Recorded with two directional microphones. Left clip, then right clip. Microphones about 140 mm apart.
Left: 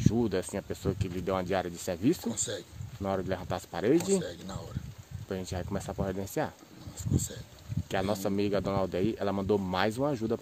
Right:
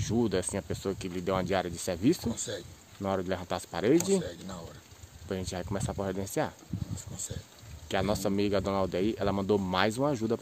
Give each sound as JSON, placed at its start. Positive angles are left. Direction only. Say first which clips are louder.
{"t": 0.0, "sound": "speech", "louder": "even", "side_deg": -15}
{"t": 2.2, "sound": "speech", "louder": "left 1 dB", "side_deg": 25}
{"t": 3.0, "sound": "speech", "louder": "right 1 dB", "side_deg": -15}
{"t": 4.2, "sound": "speech", "louder": "even", "side_deg": 15}
{"t": 5.3, "sound": "speech", "louder": "right 1 dB", "side_deg": -15}
{"t": 7.9, "sound": "speech", "louder": "right 1 dB", "side_deg": -15}